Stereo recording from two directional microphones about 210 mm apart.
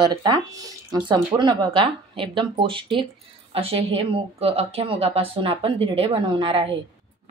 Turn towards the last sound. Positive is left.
turn(degrees=-25)  # may be behind; listen again after turning